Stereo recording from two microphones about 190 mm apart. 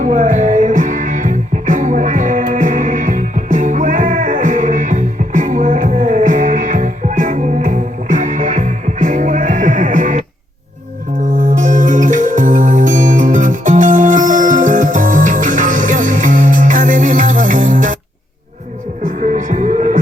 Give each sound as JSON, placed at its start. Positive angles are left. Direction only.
{"t": 0.0, "sound": "music", "side_deg": -40}
{"t": 11.3, "sound": "music", "side_deg": -45}
{"t": 19.0, "sound": "music", "side_deg": -40}